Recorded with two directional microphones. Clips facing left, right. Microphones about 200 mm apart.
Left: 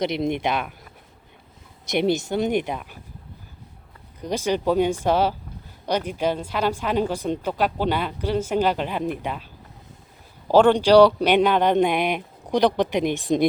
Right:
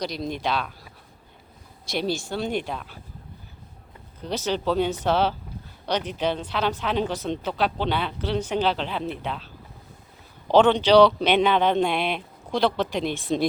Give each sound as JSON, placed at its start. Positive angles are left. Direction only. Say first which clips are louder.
{"t": 0.0, "sound": "speech", "louder": "left 5 dB", "side_deg": 25}
{"t": 1.9, "sound": "speech", "louder": "left 5 dB", "side_deg": 20}
{"t": 4.2, "sound": "a woman's voice", "louder": "left 3 dB", "side_deg": 10}
{"t": 10.5, "sound": "a woman's voice", "louder": "left 2 dB", "side_deg": 10}